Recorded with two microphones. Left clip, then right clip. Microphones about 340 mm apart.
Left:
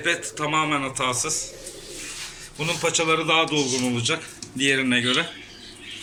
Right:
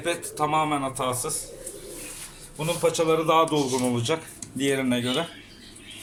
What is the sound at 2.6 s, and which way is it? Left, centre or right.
A man's voice, centre.